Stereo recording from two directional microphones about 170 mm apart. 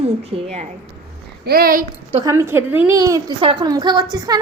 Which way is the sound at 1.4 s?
60° right (ahead or behind).